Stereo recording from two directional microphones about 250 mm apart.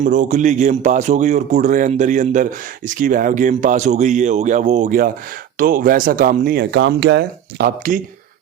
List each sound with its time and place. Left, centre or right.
0.0 s speech: right